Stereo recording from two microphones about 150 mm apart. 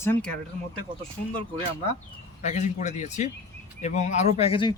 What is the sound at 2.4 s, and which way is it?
Speech, 50° left (ahead or behind).